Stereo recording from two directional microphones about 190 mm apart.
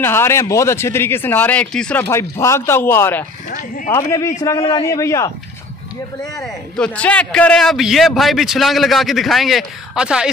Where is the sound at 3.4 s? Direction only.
45° left (ahead or behind).